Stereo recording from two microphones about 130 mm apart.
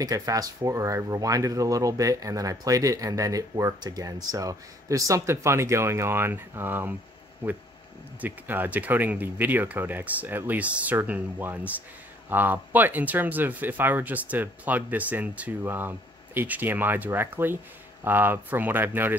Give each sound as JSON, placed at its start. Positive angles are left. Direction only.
{"t": 0.0, "sound": "speech", "side_deg": -25}
{"t": 8.2, "sound": "speech", "side_deg": -15}